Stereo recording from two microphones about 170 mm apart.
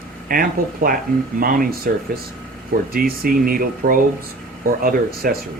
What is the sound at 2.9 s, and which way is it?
Speech, 60° right (ahead or behind).